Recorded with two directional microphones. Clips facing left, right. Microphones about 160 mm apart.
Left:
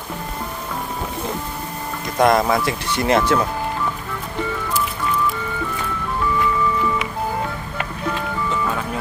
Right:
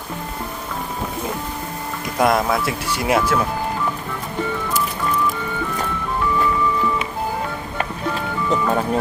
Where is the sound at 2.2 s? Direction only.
Centre (ahead or behind).